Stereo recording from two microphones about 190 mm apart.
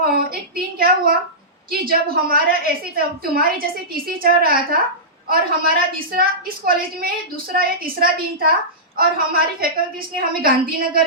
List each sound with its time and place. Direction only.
0.0 s a woman's voice: 50° right (ahead or behind)